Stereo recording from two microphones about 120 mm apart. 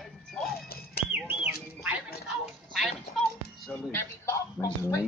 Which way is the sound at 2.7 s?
Centre (ahead or behind).